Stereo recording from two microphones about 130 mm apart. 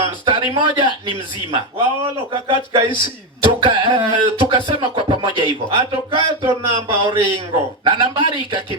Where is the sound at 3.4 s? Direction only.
40° right (ahead or behind).